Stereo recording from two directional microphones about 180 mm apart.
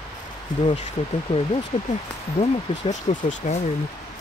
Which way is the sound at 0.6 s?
30° left (ahead or behind).